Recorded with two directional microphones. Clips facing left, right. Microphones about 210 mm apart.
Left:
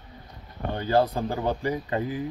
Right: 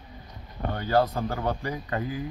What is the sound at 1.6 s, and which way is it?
Speech, 25° left (ahead or behind).